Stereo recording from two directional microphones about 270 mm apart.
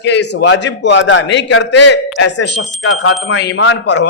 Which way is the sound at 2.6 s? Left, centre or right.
Left.